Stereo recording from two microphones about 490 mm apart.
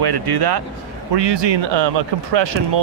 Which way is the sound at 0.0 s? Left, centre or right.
Right.